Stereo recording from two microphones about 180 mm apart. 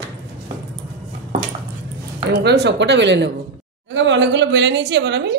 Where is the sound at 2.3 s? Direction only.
70° right (ahead or behind).